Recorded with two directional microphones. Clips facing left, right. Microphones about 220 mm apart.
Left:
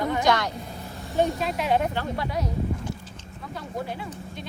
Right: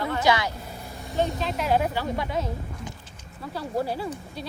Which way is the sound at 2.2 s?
25° right (ahead or behind).